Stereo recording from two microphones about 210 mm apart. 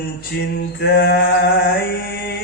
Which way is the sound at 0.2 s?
50° left (ahead or behind).